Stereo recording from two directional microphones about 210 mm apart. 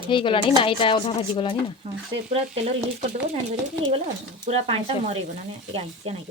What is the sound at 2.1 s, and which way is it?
Speech, 30° right (ahead or behind).